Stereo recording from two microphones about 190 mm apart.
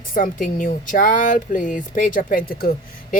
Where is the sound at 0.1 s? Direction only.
45° left (ahead or behind).